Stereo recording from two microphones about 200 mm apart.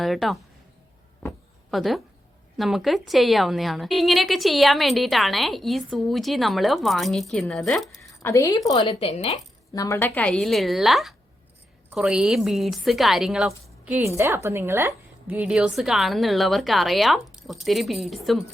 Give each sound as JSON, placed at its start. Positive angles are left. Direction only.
{"t": 0.0, "sound": "a woman's voice", "side_deg": 0}
{"t": 1.7, "sound": "a woman's voice", "side_deg": 0}
{"t": 8.1, "sound": "a woman's voice", "side_deg": 15}
{"t": 9.7, "sound": "a woman's voice", "side_deg": 15}
{"t": 10.2, "sound": "a woman's voice", "side_deg": 5}